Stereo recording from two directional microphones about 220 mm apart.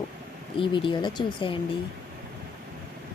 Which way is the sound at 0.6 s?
20° left (ahead or behind).